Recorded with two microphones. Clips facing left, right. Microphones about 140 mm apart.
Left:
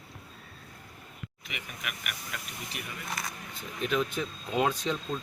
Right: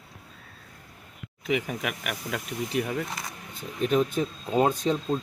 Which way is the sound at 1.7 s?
90° right.